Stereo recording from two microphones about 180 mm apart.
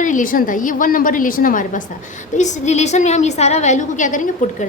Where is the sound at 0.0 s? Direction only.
45° left (ahead or behind).